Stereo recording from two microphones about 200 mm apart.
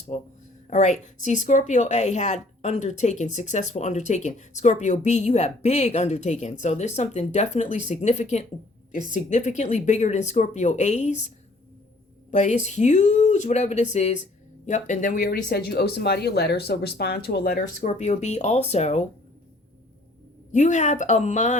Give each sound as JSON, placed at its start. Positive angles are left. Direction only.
{"t": 0.1, "sound": "speech", "side_deg": 30}
{"t": 12.3, "sound": "speech", "side_deg": 35}
{"t": 20.5, "sound": "speech", "side_deg": 35}